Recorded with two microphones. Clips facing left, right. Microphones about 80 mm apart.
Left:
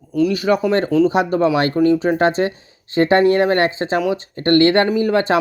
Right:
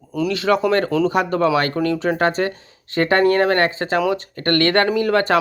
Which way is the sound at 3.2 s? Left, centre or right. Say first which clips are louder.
Left 1 dB; right.